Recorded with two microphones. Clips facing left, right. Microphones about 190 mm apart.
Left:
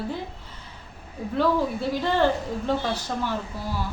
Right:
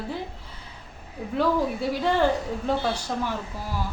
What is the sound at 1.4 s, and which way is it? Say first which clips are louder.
Speech: left 1 dB; 10° right (ahead or behind).